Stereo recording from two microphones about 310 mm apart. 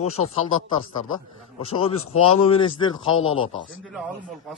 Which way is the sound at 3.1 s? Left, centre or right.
Left.